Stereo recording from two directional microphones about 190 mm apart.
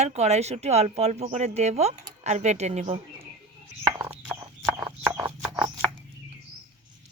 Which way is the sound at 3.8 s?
10° right (ahead or behind).